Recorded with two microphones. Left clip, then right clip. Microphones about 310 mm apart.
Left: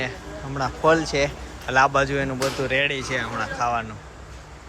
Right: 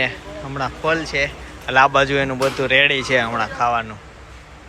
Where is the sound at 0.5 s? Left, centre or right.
Centre.